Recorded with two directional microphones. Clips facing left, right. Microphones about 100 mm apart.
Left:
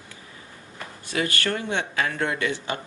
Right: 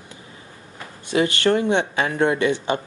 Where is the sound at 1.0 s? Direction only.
25° right (ahead or behind).